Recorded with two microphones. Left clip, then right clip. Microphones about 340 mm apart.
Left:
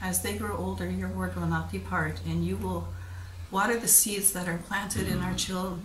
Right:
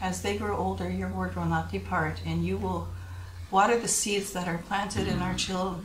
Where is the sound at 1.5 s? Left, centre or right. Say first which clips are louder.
Right 3 dB; centre.